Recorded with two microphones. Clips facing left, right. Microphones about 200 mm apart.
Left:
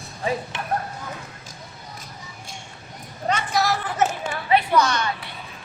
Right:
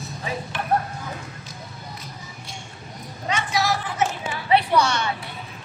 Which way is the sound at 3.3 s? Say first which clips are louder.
Left 1 dB; 50° left (ahead or behind).